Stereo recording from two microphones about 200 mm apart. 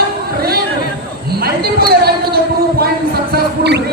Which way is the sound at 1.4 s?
50° right (ahead or behind).